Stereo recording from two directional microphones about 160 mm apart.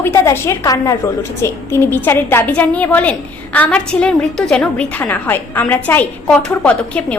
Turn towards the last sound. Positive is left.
turn(degrees=5)  # may be behind; listen again after turning